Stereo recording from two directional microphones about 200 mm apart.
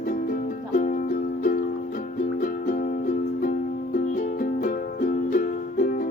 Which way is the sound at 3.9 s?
40° left (ahead or behind).